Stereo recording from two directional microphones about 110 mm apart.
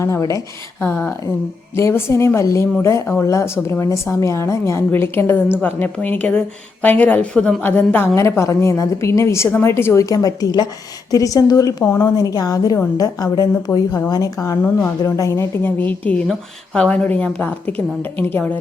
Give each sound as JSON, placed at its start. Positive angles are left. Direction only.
{"t": 0.0, "sound": "a woman's voice", "side_deg": 30}
{"t": 0.8, "sound": "a woman's voice", "side_deg": 15}
{"t": 14.6, "sound": "a woman's voice", "side_deg": 15}
{"t": 15.0, "sound": "a woman's voice", "side_deg": 30}